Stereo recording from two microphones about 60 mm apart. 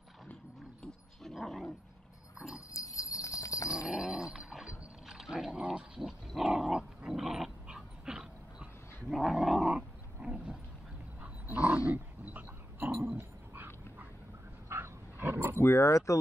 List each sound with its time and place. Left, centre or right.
1.2 s dog: centre
2.3 s dog: centre
2.7 s jingle bell: left
3.8 s dog: centre
9.1 s growling: centre
9.8 s roaring cats: centre
11.4 s dog: right
14.7 s wild animals: right
15.6 s speech: left